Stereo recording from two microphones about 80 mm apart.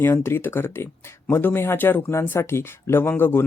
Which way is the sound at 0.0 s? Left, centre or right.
Left.